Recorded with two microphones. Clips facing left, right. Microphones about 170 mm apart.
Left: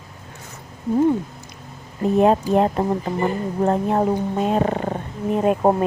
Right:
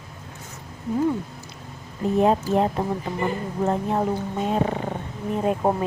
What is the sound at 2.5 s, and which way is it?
A woman's voice, 65° left (ahead or behind).